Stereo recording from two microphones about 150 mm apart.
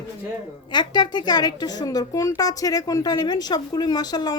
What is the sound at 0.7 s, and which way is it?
A woman's voice, 30° left (ahead or behind).